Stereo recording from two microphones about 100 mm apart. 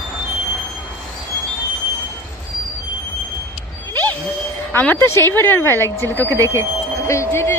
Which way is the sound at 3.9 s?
20° left (ahead or behind).